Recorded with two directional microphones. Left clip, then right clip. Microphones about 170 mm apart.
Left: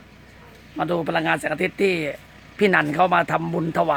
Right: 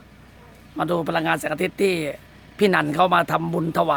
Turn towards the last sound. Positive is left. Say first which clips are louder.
# even
turn(degrees=-5)  # may be behind; listen again after turning